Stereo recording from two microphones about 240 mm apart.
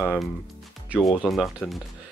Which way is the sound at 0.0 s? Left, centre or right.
Centre.